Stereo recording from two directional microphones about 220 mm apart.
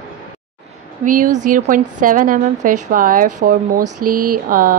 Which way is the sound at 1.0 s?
35° right (ahead or behind).